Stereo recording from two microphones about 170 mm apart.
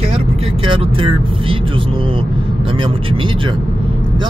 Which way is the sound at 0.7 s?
30° right (ahead or behind).